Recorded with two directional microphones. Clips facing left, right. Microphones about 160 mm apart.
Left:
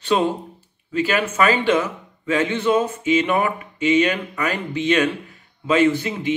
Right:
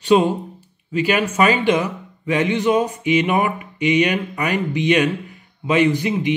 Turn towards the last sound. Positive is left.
turn(degrees=-15)  # may be behind; listen again after turning